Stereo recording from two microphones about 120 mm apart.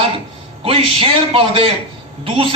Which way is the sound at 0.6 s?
50° right (ahead or behind).